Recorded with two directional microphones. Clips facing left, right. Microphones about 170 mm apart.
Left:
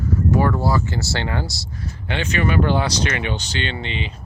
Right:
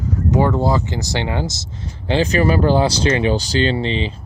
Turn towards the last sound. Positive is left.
turn(degrees=-35)  # may be behind; listen again after turning